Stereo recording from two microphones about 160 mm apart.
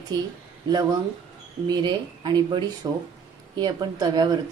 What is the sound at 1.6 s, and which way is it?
Speech, 25° right (ahead or behind).